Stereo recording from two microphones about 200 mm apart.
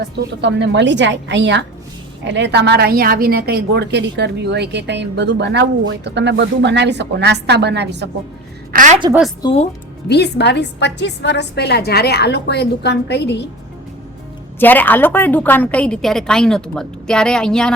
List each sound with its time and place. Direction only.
0.4 s a woman's voice: 60° right (ahead or behind)
8.7 s a woman's voice: 40° right (ahead or behind)
9.4 s speech: 25° left (ahead or behind)
10.1 s a woman's voice: 55° left (ahead or behind)
14.6 s a woman's voice: 10° left (ahead or behind)